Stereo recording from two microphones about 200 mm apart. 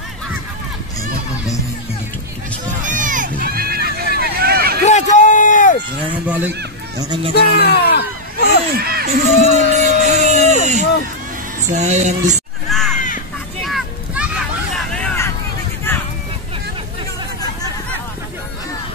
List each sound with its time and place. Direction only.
2.8 s run: 40° right (ahead or behind)
4.8 s a sound: 35° left (ahead or behind)
6.1 s speech: 5° right (ahead or behind)
7.0 s speech: 20° right (ahead or behind)
7.3 s speech: 55° left (ahead or behind)
8.7 s crowd: 50° right (ahead or behind)
11.7 s music: 35° right (ahead or behind)
12.6 s a sound: centre (ahead or behind)